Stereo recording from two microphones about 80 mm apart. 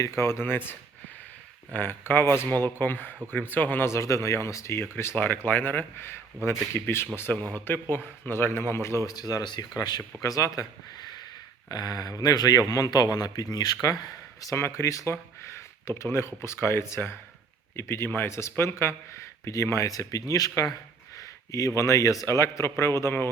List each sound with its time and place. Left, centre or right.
0.2 s speech: left
9.0 s speech: left
10.2 s speech: left
10.9 s a sound: left
11.7 s speech: left
14.5 s speech: left
21.8 s speech: left